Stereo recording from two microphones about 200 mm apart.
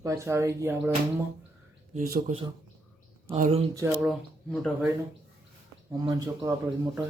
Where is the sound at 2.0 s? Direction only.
45° right (ahead or behind).